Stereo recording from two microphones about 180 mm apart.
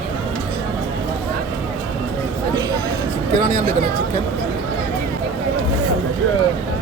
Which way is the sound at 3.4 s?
40° right (ahead or behind).